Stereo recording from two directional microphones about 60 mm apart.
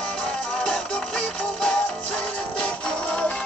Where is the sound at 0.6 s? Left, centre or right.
Centre.